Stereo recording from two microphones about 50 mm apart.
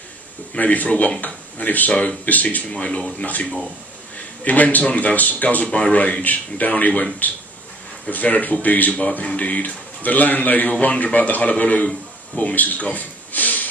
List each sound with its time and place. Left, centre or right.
0.6 s a man's voice: left
3.3 s a man's voice: left
8.1 s a man's voice: left